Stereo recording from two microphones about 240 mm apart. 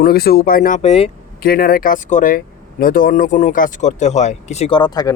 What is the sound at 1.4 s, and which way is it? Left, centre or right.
Speech, left.